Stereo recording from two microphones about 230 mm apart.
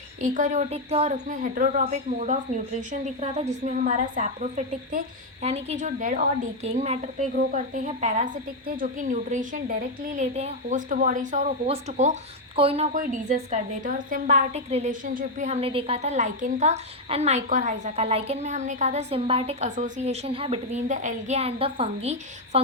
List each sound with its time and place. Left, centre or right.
0.2 s a woman's voice: right